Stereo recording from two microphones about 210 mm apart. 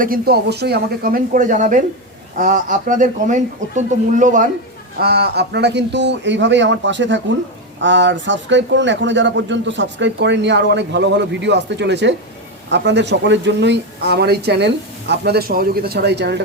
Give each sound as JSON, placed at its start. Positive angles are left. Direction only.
{"t": 0.0, "sound": "speech", "side_deg": -45}
{"t": 4.9, "sound": "a man's voice", "side_deg": -50}